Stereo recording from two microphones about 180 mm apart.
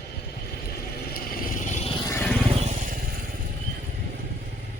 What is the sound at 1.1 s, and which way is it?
Vehicle, 50° left (ahead or behind).